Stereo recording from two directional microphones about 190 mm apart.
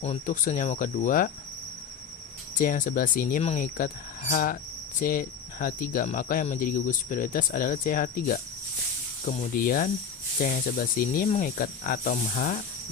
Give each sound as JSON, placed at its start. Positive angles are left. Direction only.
{"t": 0.0, "sound": "speech", "side_deg": 40}
{"t": 2.6, "sound": "speech", "side_deg": 45}